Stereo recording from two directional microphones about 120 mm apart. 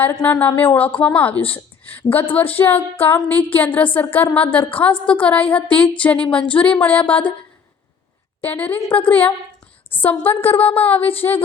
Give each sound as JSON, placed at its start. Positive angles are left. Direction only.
{"t": 0.0, "sound": "a woman's voice", "side_deg": 15}
{"t": 8.4, "sound": "a woman's voice", "side_deg": 15}